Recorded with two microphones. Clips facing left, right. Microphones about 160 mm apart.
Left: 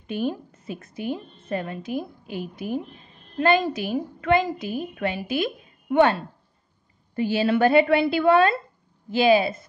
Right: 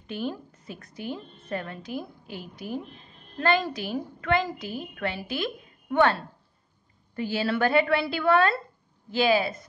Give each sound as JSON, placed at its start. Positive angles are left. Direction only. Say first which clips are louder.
{"t": 0.0, "sound": "a woman's voice", "louder": "left 5 dB", "side_deg": 15}
{"t": 7.2, "sound": "a woman's voice", "louder": "left 5 dB", "side_deg": 20}